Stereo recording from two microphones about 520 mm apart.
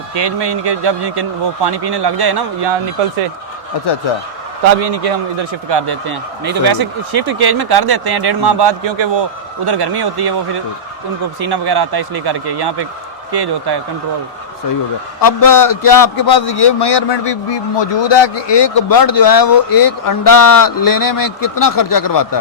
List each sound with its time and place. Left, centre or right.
0.1 s speech: right
4.8 s speech: right
11.3 s speech: right
15.2 s a man's voice: left